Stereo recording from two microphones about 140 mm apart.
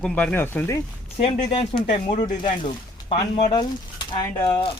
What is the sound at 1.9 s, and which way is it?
Speech, 60° left (ahead or behind).